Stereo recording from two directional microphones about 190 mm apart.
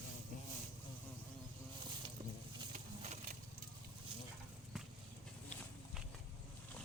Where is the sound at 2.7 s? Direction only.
35° right (ahead or behind).